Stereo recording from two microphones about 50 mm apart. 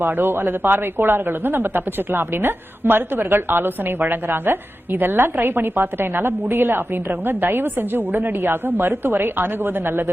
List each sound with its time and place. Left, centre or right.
0.2 s a woman's voice: right